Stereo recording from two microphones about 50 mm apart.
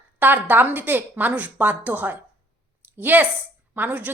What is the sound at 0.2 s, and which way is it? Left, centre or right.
A woman's voice, right.